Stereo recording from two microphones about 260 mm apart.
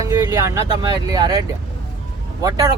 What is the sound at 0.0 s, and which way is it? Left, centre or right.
Speech, centre.